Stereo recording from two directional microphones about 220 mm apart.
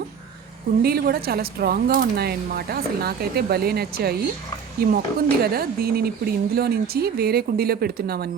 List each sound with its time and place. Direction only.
0.8 s speech: 45° right (ahead or behind)